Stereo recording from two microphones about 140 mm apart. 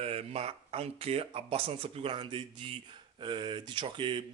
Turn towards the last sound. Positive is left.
turn(degrees=-35)  # may be behind; listen again after turning